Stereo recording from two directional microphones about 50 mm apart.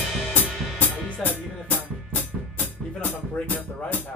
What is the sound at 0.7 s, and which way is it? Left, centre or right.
Music, left.